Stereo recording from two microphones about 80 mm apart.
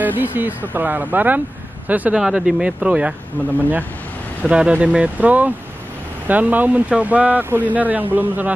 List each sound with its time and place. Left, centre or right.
0.0 s speech: right
4.4 s speech: centre